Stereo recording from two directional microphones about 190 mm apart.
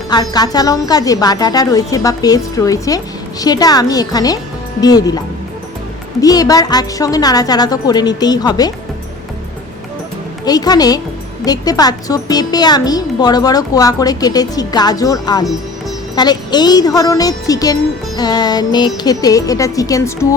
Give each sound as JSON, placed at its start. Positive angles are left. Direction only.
{"t": 0.1, "sound": "speech", "side_deg": 20}
{"t": 6.2, "sound": "speech", "side_deg": 20}
{"t": 10.4, "sound": "speech", "side_deg": 20}